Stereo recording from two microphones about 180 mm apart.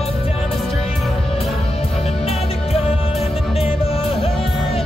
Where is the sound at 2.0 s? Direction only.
35° left (ahead or behind).